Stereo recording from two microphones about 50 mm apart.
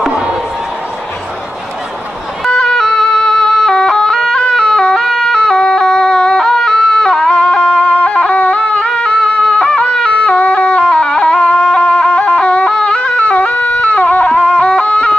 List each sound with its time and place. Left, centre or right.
2.4 s music: centre
4.4 s a sound: centre; by 14.3 s left
14.3 s music: left